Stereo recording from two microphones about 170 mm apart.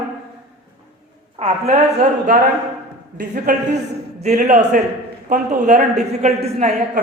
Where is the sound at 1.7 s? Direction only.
45° right (ahead or behind).